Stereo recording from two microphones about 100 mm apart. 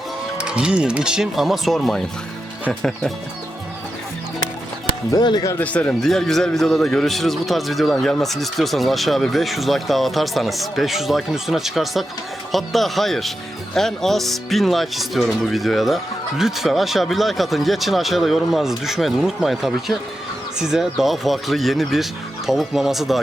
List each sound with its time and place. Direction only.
0.3 s speech: 10° right (ahead or behind)
5.1 s speech: 40° left (ahead or behind)
5.5 s a man's voice: 15° left (ahead or behind); by 23.2 s centre (ahead or behind)